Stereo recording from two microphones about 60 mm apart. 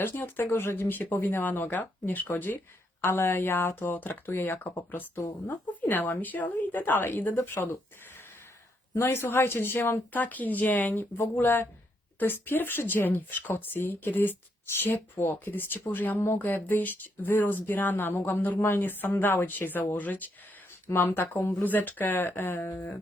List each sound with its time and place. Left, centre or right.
0.0 s speech: left
3.0 s speech: left
9.0 s speech: left
10.1 s speech: left
20.8 s speech: left